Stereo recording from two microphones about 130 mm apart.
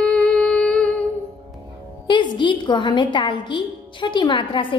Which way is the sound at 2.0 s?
40° left (ahead or behind).